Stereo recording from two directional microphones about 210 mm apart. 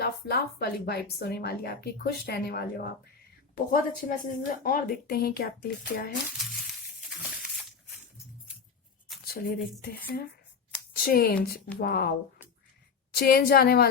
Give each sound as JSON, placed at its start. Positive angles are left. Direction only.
{"t": 0.0, "sound": "a woman's voice", "side_deg": 50}
{"t": 6.3, "sound": "a sound", "side_deg": 0}
{"t": 9.2, "sound": "a woman's voice", "side_deg": 45}
{"t": 13.1, "sound": "a woman's voice", "side_deg": 45}